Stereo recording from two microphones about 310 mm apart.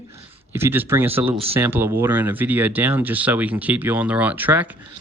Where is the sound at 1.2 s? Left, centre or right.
Centre.